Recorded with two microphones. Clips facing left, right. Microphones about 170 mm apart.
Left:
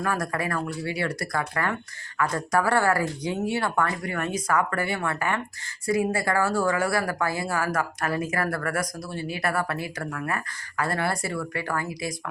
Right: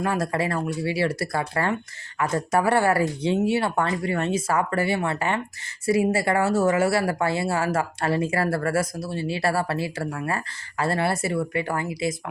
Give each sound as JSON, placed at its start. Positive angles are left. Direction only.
{"t": 0.0, "sound": "speech", "side_deg": -25}